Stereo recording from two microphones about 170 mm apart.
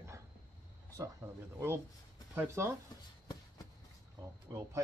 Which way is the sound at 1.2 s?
15° right (ahead or behind).